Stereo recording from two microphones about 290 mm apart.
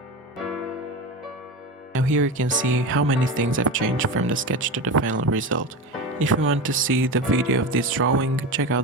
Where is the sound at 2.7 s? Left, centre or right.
Right.